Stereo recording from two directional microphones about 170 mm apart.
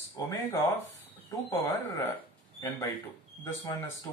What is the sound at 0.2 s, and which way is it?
Speech, 15° left (ahead or behind).